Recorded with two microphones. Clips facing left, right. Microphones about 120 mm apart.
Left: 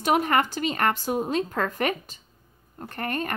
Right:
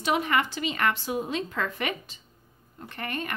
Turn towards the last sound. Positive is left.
turn(degrees=40)  # may be behind; listen again after turning